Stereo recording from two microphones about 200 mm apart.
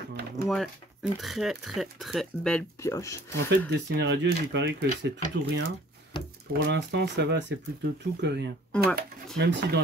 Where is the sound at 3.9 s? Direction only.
55° right (ahead or behind).